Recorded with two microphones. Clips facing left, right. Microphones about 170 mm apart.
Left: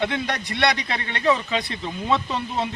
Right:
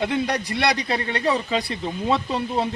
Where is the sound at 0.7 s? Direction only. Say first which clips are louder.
Right 4 dB; 35° right (ahead or behind).